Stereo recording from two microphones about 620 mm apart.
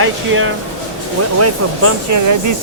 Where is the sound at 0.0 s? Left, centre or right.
Centre.